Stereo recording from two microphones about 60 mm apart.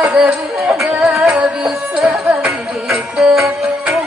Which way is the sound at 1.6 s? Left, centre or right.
Centre.